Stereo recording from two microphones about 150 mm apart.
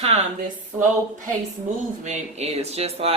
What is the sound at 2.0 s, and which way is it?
Speech, 45° right (ahead or behind).